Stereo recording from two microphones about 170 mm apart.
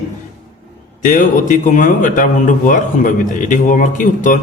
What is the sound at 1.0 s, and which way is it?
A man's voice, 50° left (ahead or behind).